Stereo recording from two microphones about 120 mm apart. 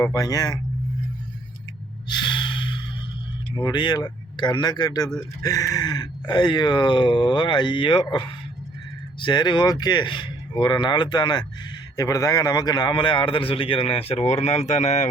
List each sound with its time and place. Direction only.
0.0 s speech: 30° left (ahead or behind)
2.0 s gasp: 40° left (ahead or behind)
3.5 s a man's voice: 35° left (ahead or behind); by 15.1 s 75° left (ahead or behind)